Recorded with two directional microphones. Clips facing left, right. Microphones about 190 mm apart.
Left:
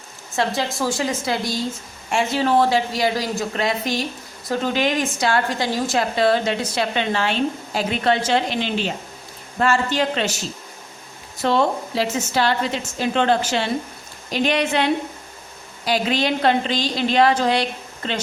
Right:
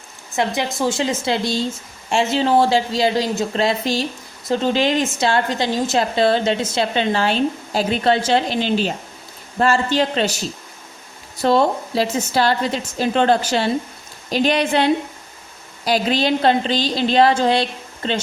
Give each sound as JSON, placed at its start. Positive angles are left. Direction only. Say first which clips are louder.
{"t": 0.3, "sound": "a woman's voice", "louder": "right 1 dB", "side_deg": -20}
{"t": 11.4, "sound": "a woman's voice", "louder": "right 3 dB", "side_deg": -35}
{"t": 15.9, "sound": "a woman's voice", "louder": "right 3 dB", "side_deg": -35}